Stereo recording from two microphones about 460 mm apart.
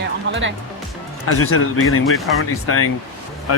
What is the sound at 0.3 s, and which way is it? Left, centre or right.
Speech, right.